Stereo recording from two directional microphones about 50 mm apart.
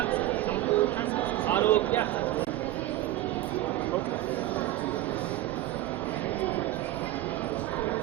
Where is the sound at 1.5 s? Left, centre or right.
Left.